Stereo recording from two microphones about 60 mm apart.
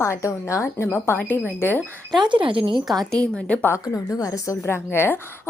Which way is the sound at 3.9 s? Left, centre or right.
Left.